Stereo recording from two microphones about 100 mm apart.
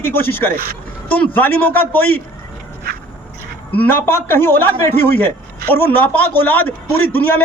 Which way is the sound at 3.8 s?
20° left (ahead or behind).